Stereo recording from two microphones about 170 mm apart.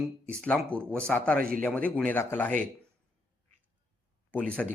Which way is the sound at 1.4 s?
60° right (ahead or behind).